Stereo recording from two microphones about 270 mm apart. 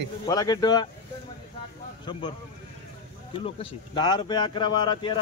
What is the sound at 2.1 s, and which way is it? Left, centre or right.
Speech, centre.